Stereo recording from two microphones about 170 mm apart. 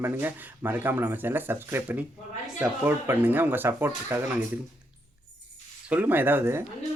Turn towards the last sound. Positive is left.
turn(degrees=-15)  # may be behind; listen again after turning